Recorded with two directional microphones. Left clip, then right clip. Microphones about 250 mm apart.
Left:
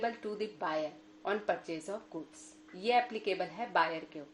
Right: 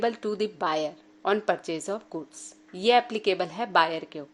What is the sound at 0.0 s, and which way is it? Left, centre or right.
A woman's voice, right.